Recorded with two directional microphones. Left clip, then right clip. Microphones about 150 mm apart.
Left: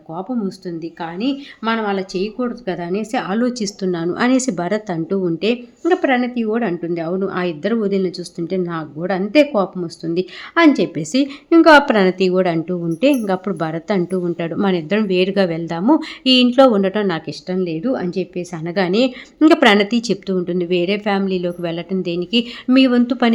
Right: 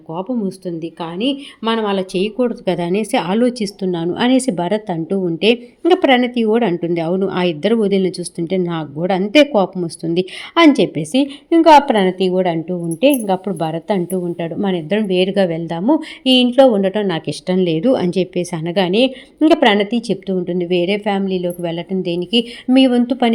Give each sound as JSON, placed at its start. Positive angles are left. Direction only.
{"t": 0.2, "sound": "a woman's voice", "side_deg": -20}
{"t": 3.6, "sound": "a woman's voice", "side_deg": -5}
{"t": 5.4, "sound": "a woman's voice", "side_deg": -15}
{"t": 11.1, "sound": "a woman's voice", "side_deg": 0}
{"t": 17.2, "sound": "a woman's voice", "side_deg": -25}
{"t": 18.7, "sound": "a woman's voice", "side_deg": -10}
{"t": 19.4, "sound": "a woman's voice", "side_deg": 5}